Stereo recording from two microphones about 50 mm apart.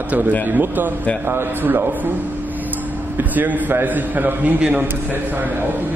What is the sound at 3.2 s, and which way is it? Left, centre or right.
A man's voice, right.